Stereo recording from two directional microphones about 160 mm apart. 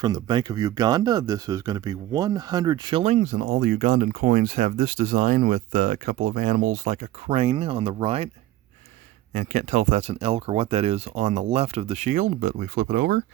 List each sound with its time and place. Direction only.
0.0 s speech: 25° right (ahead or behind)
3.0 s speech: 45° right (ahead or behind)
7.3 s speech: 40° right (ahead or behind)
9.3 s speech: 55° right (ahead or behind); by 13.2 s 80° right